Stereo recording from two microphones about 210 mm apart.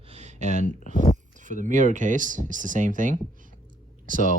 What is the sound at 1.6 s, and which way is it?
Speech, 35° right (ahead or behind).